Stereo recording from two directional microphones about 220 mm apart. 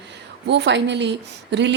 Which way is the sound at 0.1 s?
50° right (ahead or behind).